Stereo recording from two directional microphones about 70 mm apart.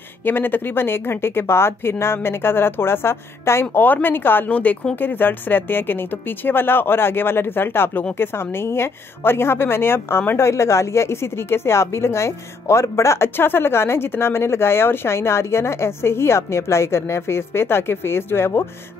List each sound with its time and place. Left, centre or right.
0.2 s a woman's voice: left